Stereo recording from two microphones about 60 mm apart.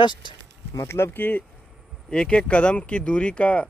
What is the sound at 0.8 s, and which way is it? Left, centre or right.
Speech, left.